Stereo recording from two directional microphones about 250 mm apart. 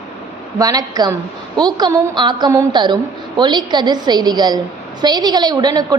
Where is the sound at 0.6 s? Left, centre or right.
Centre.